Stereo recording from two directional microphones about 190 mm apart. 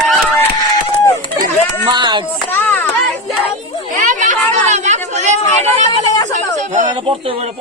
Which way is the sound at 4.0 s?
40° right (ahead or behind).